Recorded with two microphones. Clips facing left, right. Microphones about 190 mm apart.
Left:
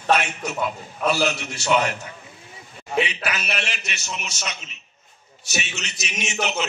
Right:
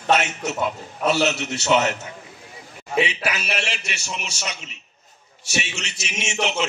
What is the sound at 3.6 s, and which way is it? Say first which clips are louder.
Speech: right 2 dB; 30° right (ahead or behind).